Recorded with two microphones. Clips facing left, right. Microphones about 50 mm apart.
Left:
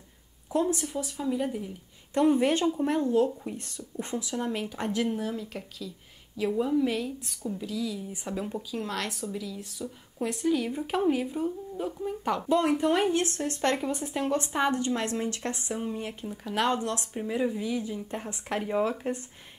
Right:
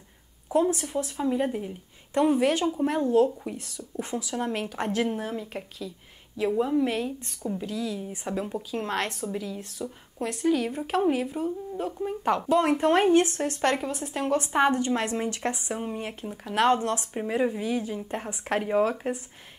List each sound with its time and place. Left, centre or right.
0.5 s speech: right
2.3 s speech: centre
3.0 s speech: right
3.3 s speech: centre
4.7 s speech: right
8.7 s speech: right
10.2 s a woman's voice: centre
12.5 s speech: right
13.6 s speech: centre
13.8 s a woman's voice: centre
14.3 s speech: right